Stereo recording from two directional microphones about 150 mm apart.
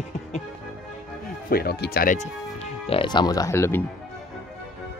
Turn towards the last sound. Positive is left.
turn(degrees=15)  # may be behind; listen again after turning